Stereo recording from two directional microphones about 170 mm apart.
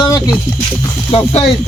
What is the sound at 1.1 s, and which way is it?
Speech, 35° left (ahead or behind).